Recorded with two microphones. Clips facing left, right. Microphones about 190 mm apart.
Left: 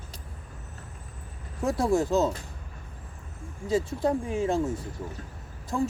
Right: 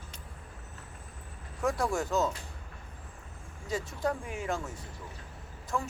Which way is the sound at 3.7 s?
30° left (ahead or behind).